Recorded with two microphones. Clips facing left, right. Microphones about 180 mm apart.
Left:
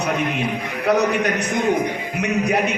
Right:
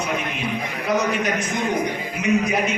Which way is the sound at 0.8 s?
65° left (ahead or behind).